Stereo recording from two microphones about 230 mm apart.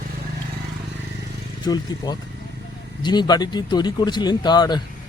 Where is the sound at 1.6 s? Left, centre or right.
Centre.